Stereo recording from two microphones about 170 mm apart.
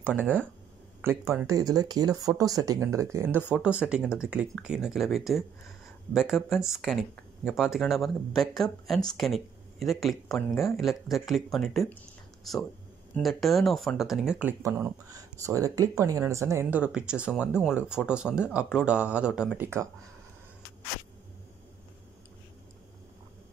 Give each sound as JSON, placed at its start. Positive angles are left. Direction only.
{"t": 0.0, "sound": "speech", "side_deg": -10}
{"t": 1.5, "sound": "speech", "side_deg": -20}
{"t": 14.6, "sound": "speech", "side_deg": -15}